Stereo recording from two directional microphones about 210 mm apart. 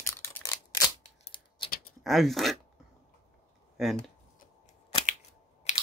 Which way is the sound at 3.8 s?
Centre (ahead or behind).